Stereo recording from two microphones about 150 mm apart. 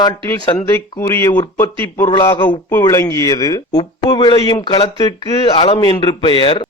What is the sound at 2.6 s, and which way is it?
A man's voice, 20° left (ahead or behind).